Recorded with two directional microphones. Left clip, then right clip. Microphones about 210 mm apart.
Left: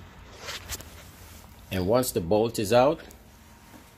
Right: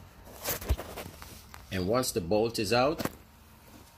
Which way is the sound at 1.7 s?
25° left (ahead or behind).